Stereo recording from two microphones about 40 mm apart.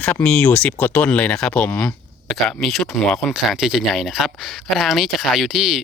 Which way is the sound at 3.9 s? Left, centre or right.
Centre.